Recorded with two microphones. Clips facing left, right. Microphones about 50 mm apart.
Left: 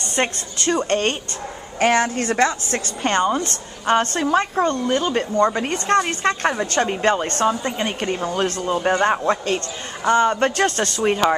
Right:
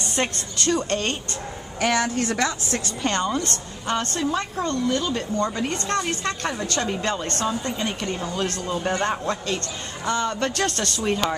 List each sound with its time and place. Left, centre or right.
0.1 s speech: left
0.8 s a woman's voice: left
3.8 s a woman's voice: left